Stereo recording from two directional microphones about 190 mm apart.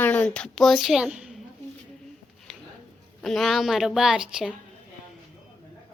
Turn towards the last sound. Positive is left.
turn(degrees=-5)  # may be behind; listen again after turning